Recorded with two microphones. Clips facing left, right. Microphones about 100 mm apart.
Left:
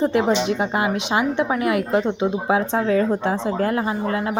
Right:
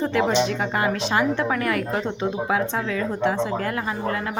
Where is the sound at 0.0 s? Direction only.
25° left (ahead or behind).